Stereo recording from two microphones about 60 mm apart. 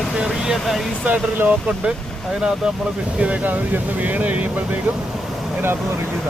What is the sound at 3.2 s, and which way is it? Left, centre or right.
Speech, right.